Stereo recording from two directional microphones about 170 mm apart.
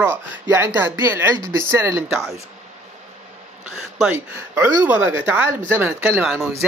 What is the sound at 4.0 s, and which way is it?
Speech, 10° right (ahead or behind).